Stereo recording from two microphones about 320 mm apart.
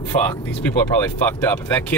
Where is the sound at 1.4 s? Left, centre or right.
Centre.